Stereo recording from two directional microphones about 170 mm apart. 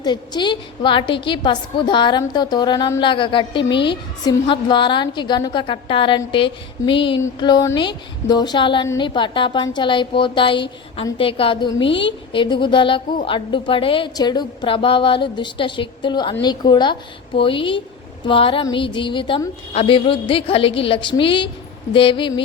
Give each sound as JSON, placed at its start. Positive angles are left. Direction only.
{"t": 0.0, "sound": "a woman's voice", "side_deg": 25}